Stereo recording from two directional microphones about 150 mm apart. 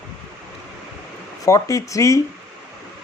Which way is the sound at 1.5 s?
20° left (ahead or behind).